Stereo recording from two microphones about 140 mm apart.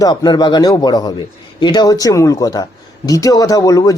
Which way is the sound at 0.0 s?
30° left (ahead or behind).